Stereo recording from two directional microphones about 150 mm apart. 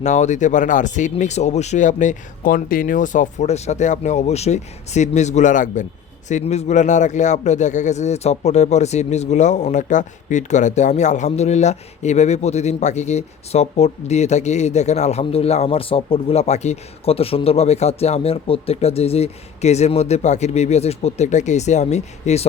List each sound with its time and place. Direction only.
0.0 s a man's voice: 50° left (ahead or behind)